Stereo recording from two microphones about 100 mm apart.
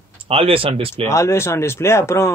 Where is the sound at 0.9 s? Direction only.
25° left (ahead or behind).